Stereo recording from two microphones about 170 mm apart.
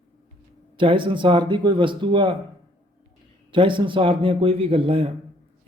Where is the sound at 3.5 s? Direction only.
30° right (ahead or behind).